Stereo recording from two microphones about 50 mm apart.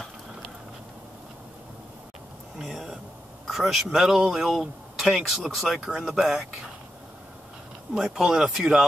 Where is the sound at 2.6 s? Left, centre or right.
Centre.